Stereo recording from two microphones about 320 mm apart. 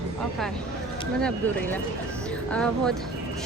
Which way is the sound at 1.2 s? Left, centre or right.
Centre.